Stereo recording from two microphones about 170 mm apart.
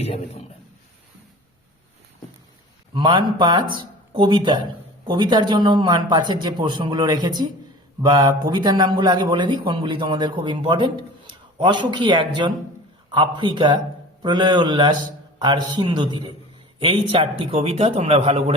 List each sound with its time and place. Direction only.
2.9 s a man's voice: 30° right (ahead or behind)